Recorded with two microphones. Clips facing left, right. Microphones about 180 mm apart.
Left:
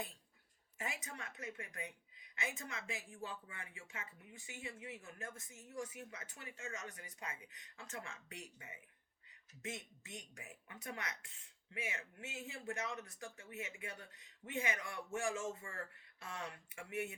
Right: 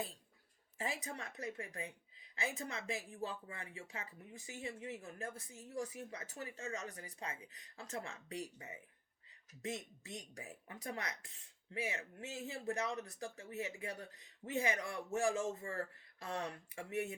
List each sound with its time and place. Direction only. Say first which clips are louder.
0.8 s speech: right 4 dB; 35° right (ahead or behind)